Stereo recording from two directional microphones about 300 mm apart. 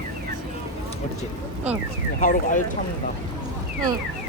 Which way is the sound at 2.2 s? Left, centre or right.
Left.